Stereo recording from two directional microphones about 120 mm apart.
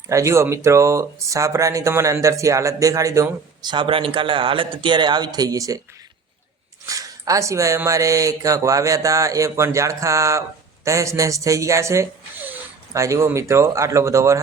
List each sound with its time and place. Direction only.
0.1 s speech: 25° right (ahead or behind)
6.8 s speech: 30° right (ahead or behind)